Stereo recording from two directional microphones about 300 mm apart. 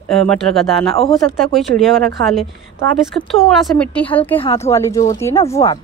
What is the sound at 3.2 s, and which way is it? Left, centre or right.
A woman's voice, centre.